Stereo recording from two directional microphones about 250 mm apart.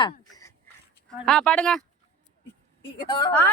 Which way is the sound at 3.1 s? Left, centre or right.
Centre.